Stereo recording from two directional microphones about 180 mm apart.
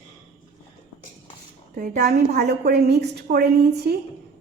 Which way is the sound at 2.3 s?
65° right (ahead or behind).